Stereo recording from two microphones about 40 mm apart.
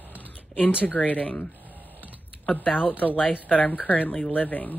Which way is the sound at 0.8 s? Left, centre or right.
Left.